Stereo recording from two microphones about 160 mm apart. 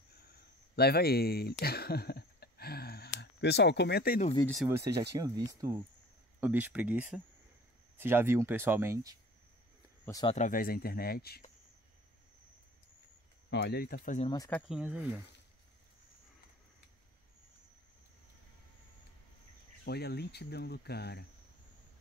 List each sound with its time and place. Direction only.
0.7 s speech: 80° left
4.6 s speech: 15° right (ahead or behind)
10.2 s speech: 50° left (ahead or behind); by 11.4 s 75° left (ahead or behind)
13.5 s speech: 90° left; by 14.1 s 65° left (ahead or behind)
14.7 s speech: 5° right (ahead or behind)
19.8 s speech: 90° left